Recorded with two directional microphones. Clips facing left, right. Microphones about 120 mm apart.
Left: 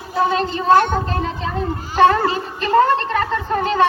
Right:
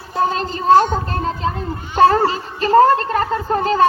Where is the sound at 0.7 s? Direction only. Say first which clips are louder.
Right 2 dB; 60° left (ahead or behind).